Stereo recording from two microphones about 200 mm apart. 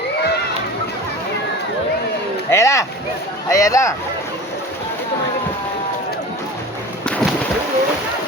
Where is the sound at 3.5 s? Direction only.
15° left (ahead or behind).